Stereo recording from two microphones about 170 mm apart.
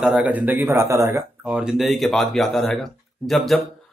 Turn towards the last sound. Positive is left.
turn(degrees=0)  # may be behind; listen again after turning